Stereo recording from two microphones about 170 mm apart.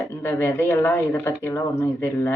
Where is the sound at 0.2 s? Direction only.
10° left (ahead or behind).